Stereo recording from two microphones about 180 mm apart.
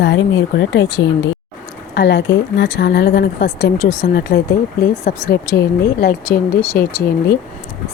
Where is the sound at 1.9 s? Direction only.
70° left (ahead or behind).